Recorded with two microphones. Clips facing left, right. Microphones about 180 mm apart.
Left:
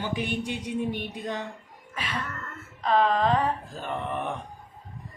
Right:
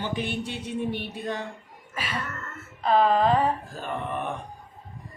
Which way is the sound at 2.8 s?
5° right (ahead or behind).